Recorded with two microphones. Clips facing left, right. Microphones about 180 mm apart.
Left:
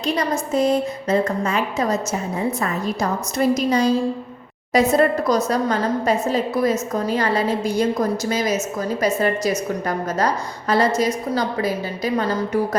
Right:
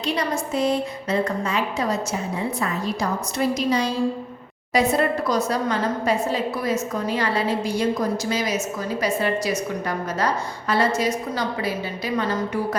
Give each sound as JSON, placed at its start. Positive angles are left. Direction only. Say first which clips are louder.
{"t": 0.5, "sound": "a woman's voice", "louder": "left 4 dB", "side_deg": 45}